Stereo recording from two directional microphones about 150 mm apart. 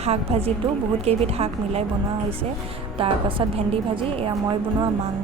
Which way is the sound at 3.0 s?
35° right (ahead or behind).